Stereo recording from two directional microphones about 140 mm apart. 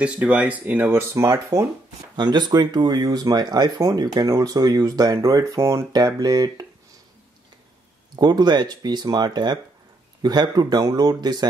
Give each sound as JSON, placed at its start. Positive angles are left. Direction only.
{"t": 0.0, "sound": "speech", "side_deg": -10}
{"t": 8.2, "sound": "speech", "side_deg": -30}